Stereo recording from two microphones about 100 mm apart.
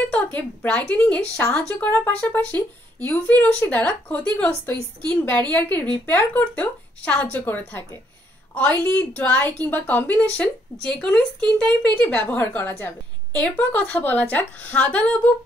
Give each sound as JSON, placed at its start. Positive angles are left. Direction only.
{"t": 0.0, "sound": "a woman's voice", "side_deg": 15}